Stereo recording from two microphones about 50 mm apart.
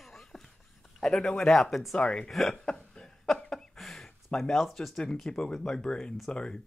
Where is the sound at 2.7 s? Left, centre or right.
Centre.